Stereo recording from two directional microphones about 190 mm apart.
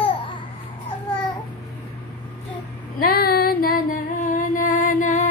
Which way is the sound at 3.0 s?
55° left (ahead or behind).